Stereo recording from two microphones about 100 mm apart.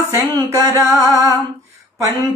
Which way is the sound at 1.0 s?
30° right (ahead or behind).